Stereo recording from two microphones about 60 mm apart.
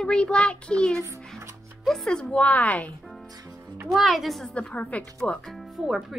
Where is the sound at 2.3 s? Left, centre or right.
Left.